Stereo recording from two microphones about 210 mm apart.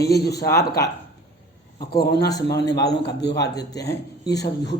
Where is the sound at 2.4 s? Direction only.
55° left (ahead or behind).